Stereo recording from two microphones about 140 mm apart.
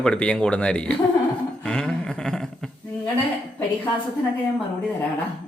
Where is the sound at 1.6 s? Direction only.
5° left (ahead or behind).